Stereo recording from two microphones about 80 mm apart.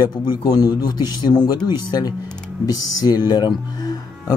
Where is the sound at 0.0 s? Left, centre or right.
Left.